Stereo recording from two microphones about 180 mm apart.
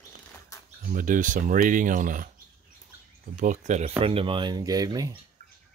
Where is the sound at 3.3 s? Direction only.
45° right (ahead or behind).